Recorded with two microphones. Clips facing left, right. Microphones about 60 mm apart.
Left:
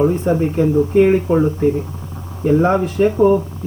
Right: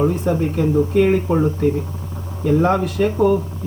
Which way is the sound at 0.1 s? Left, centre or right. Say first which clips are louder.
Left 3 dB; left.